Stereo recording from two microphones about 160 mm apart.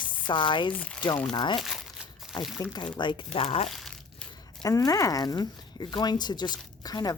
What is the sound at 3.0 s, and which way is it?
Speech, 30° left (ahead or behind).